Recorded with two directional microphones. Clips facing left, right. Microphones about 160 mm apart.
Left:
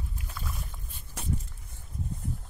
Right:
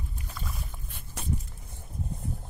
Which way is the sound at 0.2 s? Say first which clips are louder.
Right 1 dB; centre (ahead or behind).